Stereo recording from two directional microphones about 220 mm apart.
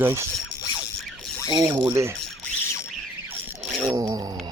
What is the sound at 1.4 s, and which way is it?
Speech, 20° right (ahead or behind).